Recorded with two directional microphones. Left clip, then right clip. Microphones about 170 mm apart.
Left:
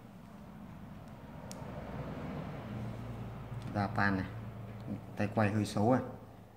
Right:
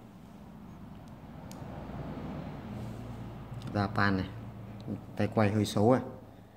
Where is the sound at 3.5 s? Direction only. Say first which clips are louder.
Right 3 dB; 40° right (ahead or behind).